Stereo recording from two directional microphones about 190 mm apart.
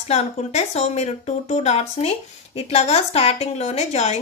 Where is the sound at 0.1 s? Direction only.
35° left (ahead or behind).